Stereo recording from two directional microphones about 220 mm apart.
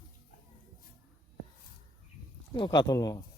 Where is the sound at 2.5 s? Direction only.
20° left (ahead or behind).